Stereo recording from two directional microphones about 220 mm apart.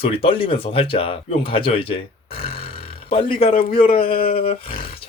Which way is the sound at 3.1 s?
25° left (ahead or behind).